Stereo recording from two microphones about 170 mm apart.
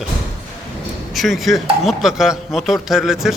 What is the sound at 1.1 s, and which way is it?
Speech, centre (ahead or behind).